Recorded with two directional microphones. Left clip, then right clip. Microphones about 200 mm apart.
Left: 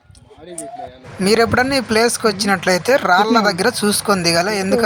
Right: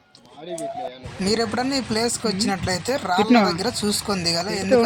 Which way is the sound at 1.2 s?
25° left (ahead or behind).